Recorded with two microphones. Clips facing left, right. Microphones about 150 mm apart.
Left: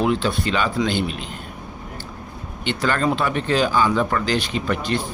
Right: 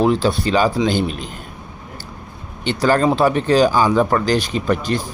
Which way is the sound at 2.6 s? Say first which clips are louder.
Right 5 dB; 35° right (ahead or behind).